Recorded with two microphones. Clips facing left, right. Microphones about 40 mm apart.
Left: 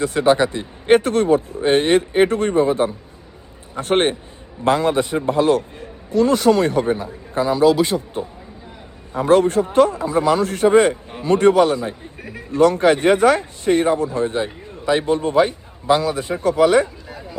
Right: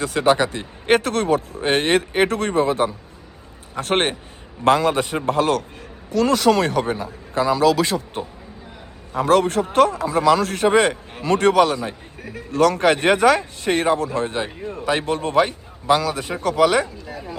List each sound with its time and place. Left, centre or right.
0.0 s a man's voice: right
7.6 s speech: right
9.3 s a man's voice: right